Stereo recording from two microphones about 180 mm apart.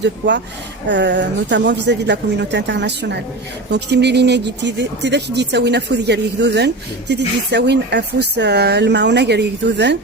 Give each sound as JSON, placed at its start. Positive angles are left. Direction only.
{"t": 0.0, "sound": "speech", "side_deg": -75}